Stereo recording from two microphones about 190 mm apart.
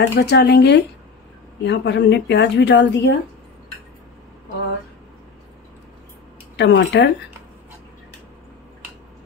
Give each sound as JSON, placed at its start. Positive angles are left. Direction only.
{"t": 0.0, "sound": "speech", "side_deg": 65}
{"t": 6.5, "sound": "speech", "side_deg": 65}